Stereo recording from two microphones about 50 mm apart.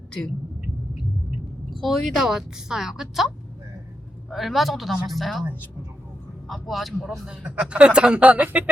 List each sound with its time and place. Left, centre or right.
1.8 s a woman's voice: centre
6.5 s a woman's voice: centre
7.3 s speech: right